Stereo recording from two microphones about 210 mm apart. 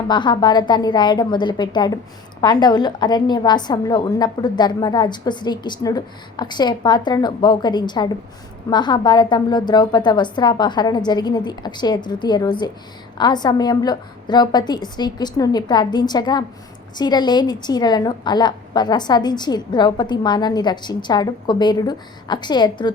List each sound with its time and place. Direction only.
0.1 s a woman's voice: 20° left (ahead or behind)